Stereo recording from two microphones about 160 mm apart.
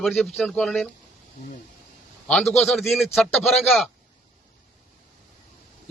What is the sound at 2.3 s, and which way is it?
Speech, centre (ahead or behind).